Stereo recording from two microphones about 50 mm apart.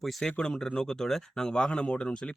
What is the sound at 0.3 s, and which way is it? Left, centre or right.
Speech, centre.